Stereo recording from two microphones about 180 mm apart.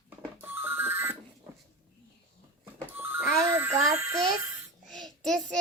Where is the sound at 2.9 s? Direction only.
10° right (ahead or behind).